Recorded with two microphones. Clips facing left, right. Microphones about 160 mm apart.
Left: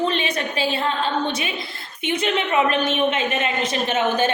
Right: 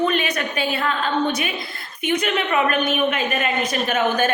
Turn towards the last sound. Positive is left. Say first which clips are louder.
# even
turn(degrees=25)  # may be behind; listen again after turning